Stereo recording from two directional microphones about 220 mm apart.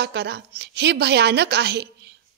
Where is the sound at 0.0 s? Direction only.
50° right (ahead or behind).